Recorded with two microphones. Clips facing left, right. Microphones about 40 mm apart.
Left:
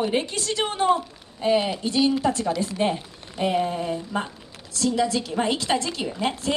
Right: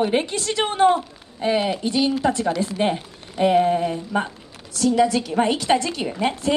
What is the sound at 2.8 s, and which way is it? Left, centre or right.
Speech, centre.